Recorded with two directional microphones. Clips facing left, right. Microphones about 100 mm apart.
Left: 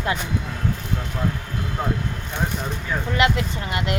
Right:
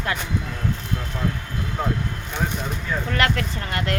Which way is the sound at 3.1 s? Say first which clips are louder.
Left 3 dB; 15° left (ahead or behind).